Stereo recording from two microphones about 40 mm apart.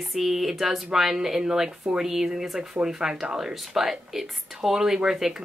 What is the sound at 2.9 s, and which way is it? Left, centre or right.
Speech, centre.